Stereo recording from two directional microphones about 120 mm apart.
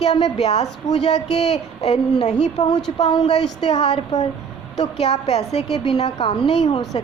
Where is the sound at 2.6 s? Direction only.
75° left (ahead or behind).